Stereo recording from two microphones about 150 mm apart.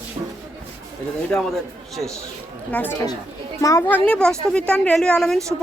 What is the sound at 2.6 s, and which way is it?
A woman's voice, 10° left (ahead or behind).